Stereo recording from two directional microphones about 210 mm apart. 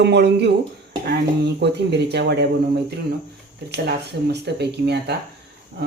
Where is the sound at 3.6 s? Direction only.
50° right (ahead or behind).